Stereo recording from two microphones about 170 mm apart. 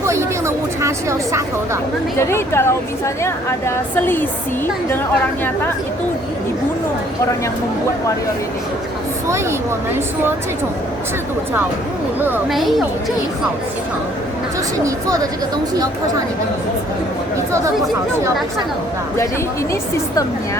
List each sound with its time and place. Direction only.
0.0 s a sound: 15° right (ahead or behind)
2.1 s a woman's voice: 15° left (ahead or behind)
3.9 s a woman's voice: 10° left (ahead or behind)
9.2 s speech: 15° right (ahead or behind)
12.5 s a woman's voice: centre (ahead or behind)
14.8 s a woman's voice: 20° right (ahead or behind)